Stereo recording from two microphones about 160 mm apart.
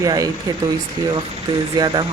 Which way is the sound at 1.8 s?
25° right (ahead or behind).